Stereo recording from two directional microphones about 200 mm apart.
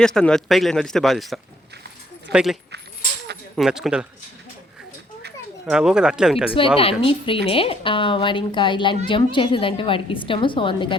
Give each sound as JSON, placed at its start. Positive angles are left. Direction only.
{"t": 0.0, "sound": "speech", "side_deg": 5}
{"t": 5.6, "sound": "speech", "side_deg": -5}
{"t": 6.5, "sound": "speech", "side_deg": 25}